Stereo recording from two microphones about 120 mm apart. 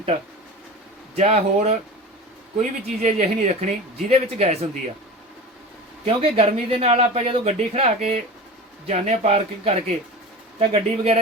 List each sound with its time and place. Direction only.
1.1 s speech: 65° right (ahead or behind)
2.6 s speech: 80° right
6.1 s speech: 55° right (ahead or behind)